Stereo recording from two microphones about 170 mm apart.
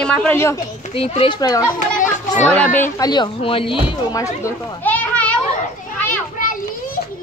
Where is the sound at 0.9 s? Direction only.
35° left (ahead or behind).